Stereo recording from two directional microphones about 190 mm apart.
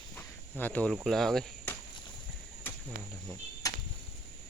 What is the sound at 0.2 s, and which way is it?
Cricket, 10° left (ahead or behind).